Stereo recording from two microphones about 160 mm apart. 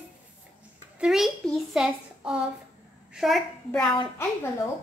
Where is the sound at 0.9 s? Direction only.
5° right (ahead or behind).